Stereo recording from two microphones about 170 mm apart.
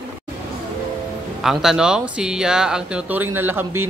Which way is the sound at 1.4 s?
5° right (ahead or behind).